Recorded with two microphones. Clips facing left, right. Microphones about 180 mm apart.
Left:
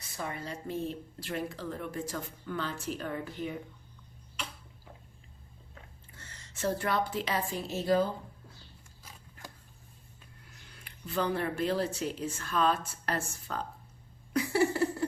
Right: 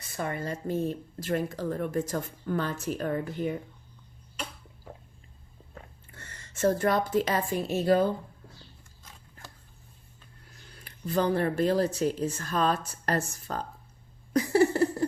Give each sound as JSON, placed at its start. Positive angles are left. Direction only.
{"t": 0.2, "sound": "speech", "side_deg": -55}
{"t": 6.1, "sound": "a woman's voice", "side_deg": -55}
{"t": 10.8, "sound": "speech", "side_deg": -40}
{"t": 14.3, "sound": "a sound", "side_deg": -40}